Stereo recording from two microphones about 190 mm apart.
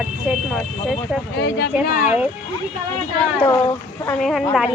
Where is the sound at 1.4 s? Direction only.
65° left (ahead or behind).